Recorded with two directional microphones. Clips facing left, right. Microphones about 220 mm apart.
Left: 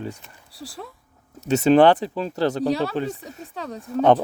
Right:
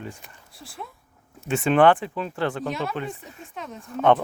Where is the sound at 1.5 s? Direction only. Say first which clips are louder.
Left 3 dB; 40° left (ahead or behind).